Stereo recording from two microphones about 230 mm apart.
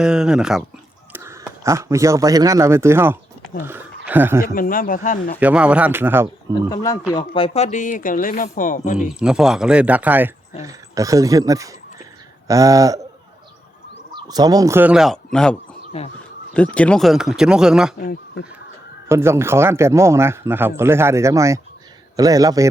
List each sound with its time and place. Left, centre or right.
0.0 s speech: centre
4.4 s speech: left
5.4 s a man's voice: centre
6.7 s speech: centre; by 9.1 s left
9.1 s a man's voice: centre
14.1 s speech: centre
15.9 s speech: left
16.6 s speech: centre
17.9 s speech: left
19.0 s a man's voice: centre